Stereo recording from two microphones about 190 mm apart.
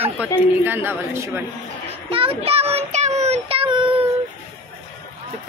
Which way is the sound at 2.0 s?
30° right (ahead or behind).